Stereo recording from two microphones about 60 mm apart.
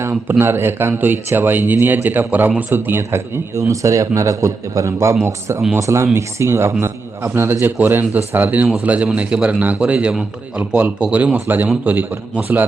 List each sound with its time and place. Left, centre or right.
0.0 s speech: right
3.5 s a man's voice: right
7.8 s a man's voice: right